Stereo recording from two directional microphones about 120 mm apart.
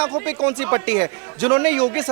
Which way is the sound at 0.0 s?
20° right (ahead or behind).